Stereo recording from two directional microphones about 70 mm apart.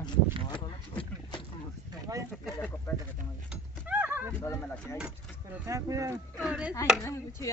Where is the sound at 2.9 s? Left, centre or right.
Left.